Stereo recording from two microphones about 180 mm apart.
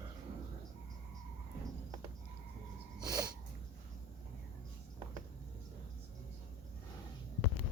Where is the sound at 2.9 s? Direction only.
20° right (ahead or behind).